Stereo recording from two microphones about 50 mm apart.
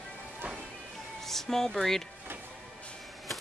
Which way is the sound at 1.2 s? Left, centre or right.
Centre.